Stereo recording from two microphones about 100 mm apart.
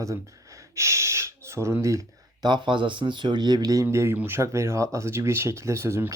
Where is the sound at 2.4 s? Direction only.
50° right (ahead or behind).